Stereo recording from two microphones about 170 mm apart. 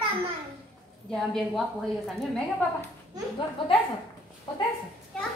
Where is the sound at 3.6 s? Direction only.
30° left (ahead or behind).